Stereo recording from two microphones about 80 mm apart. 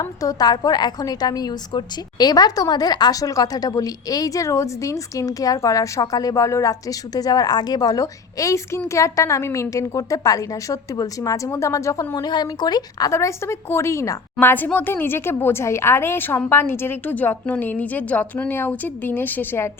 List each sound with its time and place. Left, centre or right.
0.0 s a woman's voice: left
12.1 s speech: left
13.1 s a woman's voice: left
14.3 s a woman's voice: left